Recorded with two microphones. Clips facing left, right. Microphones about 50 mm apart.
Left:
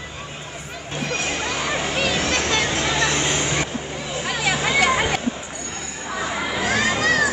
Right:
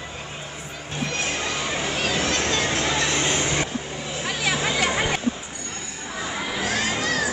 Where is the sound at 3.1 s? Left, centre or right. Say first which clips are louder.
Left 1 dB; centre.